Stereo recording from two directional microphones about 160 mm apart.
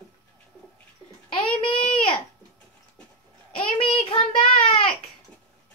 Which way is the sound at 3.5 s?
30° left (ahead or behind).